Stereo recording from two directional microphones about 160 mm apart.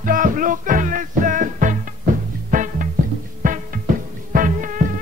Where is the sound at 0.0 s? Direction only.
55° right (ahead or behind).